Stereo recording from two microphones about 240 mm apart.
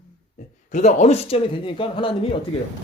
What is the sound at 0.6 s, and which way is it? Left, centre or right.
Speech, left.